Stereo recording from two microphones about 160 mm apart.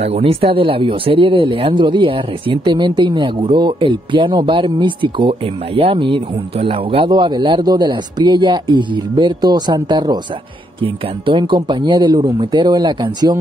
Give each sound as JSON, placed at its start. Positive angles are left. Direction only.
{"t": 0.0, "sound": "a man's voice", "side_deg": -35}